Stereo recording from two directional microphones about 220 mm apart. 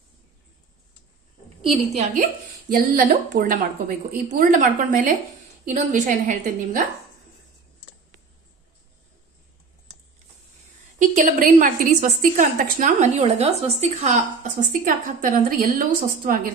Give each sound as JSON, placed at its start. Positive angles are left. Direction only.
{"t": 1.6, "sound": "a woman's voice", "side_deg": -30}
{"t": 11.0, "sound": "a woman's voice", "side_deg": -35}